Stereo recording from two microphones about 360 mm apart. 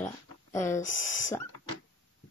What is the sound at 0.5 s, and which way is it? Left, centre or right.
Speech, centre.